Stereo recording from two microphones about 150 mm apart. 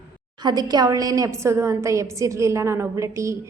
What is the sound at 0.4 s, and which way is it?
A woman's voice, 25° right (ahead or behind).